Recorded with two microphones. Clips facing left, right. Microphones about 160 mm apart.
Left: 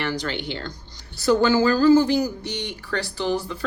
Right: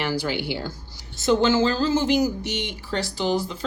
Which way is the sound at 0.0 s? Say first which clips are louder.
Right 1 dB; 10° right (ahead or behind).